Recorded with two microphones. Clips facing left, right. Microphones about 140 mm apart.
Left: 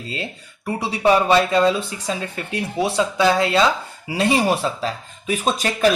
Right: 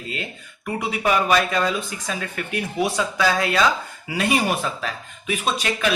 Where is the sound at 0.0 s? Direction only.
30° left (ahead or behind).